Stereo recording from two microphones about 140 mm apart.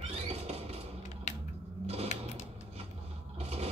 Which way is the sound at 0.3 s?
45° right (ahead or behind).